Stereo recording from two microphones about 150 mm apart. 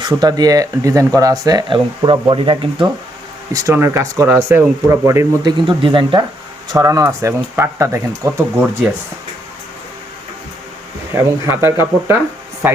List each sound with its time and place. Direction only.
0.0 s speech: 25° right (ahead or behind)
3.5 s speech: 20° right (ahead or behind)
5.4 s speech: 30° right (ahead or behind)
6.7 s speech: 20° right (ahead or behind)
11.1 s speech: 15° right (ahead or behind)